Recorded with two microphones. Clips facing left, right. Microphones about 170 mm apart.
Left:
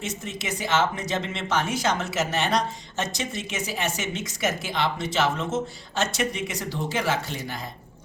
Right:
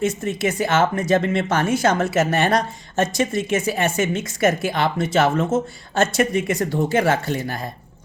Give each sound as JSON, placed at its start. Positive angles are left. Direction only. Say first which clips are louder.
{"t": 0.0, "sound": "speech", "louder": "right 11 dB", "side_deg": -55}